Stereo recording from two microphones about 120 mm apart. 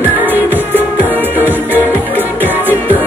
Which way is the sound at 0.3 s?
15° right (ahead or behind).